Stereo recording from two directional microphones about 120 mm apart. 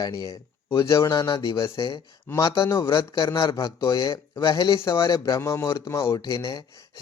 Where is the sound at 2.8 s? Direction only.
40° left (ahead or behind).